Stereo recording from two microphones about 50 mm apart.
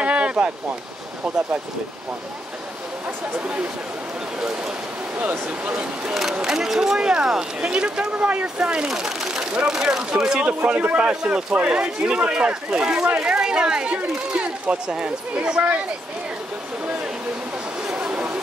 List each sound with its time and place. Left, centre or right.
0.0 s a sound: right
3.3 s speech: right
6.3 s a man's voice: centre
8.8 s a sound: centre
9.7 s a man's voice: centre
10.4 s a man's voice: right
17.8 s chatter: centre